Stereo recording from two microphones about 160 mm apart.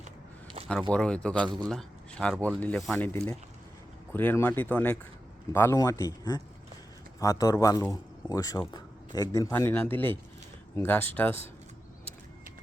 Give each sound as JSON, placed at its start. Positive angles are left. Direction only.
{"t": 0.7, "sound": "speech", "side_deg": 5}
{"t": 1.4, "sound": "speech", "side_deg": -30}
{"t": 1.7, "sound": "speech", "side_deg": 5}